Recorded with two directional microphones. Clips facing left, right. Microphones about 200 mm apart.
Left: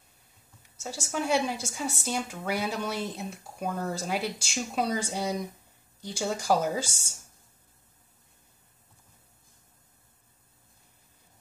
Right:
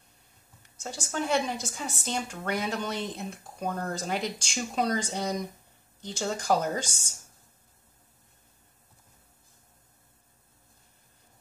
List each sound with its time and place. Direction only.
0.6 s a woman's voice: 5° left (ahead or behind)